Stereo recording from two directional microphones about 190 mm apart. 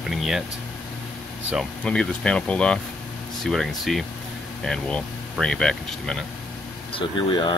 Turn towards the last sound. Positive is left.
turn(degrees=25)  # may be behind; listen again after turning